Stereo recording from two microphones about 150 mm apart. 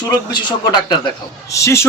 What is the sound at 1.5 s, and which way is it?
Speech, 20° left (ahead or behind).